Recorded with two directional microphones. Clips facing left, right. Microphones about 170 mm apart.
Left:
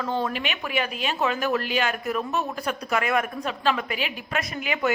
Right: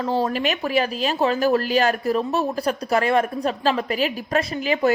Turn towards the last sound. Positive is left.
turn(degrees=-35)  # may be behind; listen again after turning